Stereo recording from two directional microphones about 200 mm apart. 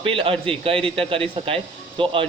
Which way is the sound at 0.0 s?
25° right (ahead or behind).